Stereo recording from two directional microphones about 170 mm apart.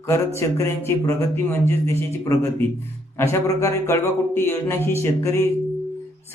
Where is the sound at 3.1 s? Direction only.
15° left (ahead or behind).